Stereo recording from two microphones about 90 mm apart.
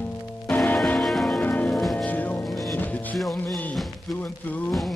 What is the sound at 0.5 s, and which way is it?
Music, 20° left (ahead or behind).